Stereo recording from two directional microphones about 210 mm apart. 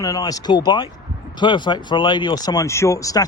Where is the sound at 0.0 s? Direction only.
15° left (ahead or behind).